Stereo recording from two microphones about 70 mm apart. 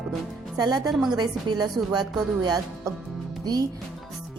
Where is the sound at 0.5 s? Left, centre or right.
Right.